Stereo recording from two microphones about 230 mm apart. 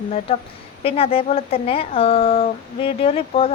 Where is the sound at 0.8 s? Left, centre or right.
Left.